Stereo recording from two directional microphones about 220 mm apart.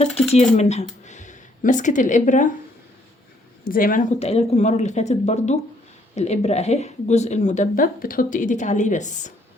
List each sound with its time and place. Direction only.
0.0 s speech: 30° left (ahead or behind)
3.6 s a woman's voice: 40° left (ahead or behind)